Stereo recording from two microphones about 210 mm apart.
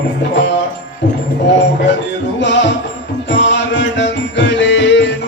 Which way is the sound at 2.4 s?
60° left (ahead or behind).